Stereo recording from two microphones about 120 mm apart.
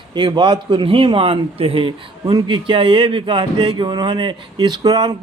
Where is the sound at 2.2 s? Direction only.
40° right (ahead or behind).